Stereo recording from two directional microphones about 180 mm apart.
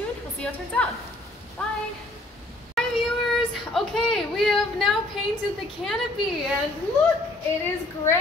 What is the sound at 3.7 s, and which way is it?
Speech, centre (ahead or behind).